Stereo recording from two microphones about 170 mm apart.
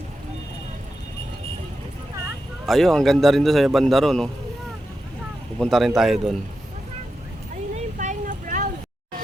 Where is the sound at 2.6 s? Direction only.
Centre (ahead or behind).